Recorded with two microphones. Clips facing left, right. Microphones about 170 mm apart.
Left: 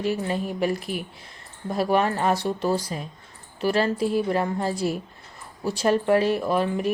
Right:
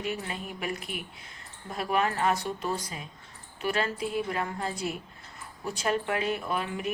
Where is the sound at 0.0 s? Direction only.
35° left (ahead or behind).